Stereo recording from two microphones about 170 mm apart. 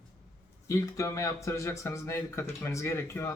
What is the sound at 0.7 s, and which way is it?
Speech, 20° left (ahead or behind).